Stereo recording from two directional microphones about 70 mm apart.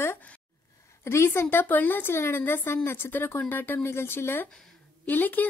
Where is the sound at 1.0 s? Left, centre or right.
Left.